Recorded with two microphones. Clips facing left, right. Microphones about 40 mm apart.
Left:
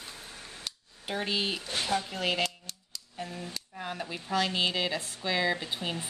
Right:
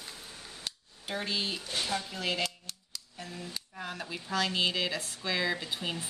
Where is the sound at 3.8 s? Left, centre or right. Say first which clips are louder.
Left 2 dB; centre.